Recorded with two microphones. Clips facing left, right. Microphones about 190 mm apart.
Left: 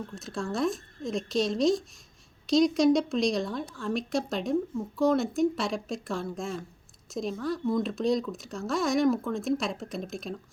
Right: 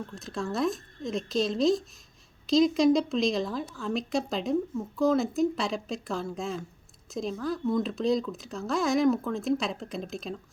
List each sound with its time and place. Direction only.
0.2 s speech: centre (ahead or behind)